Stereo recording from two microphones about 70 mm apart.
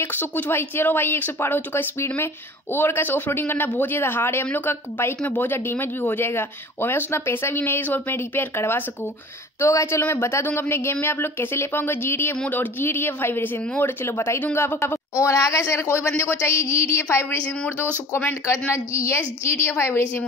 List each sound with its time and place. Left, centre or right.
0.0 s speech: left
18.7 s speech: left